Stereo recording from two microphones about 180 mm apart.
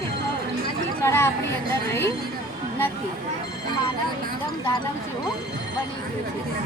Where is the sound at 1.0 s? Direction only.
15° left (ahead or behind).